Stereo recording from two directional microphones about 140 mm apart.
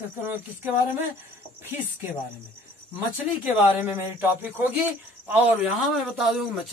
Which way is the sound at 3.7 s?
15° right (ahead or behind).